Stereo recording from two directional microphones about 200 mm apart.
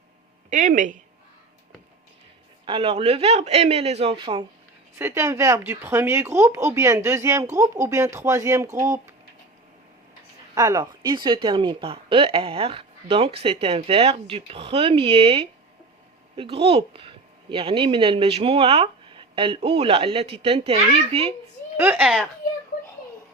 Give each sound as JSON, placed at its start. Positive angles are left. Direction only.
{"t": 0.5, "sound": "a man's voice", "side_deg": -40}
{"t": 2.6, "sound": "a man's voice", "side_deg": -25}
{"t": 4.9, "sound": "speech", "side_deg": -15}
{"t": 10.5, "sound": "speech", "side_deg": -15}
{"t": 21.8, "sound": "speech", "side_deg": -10}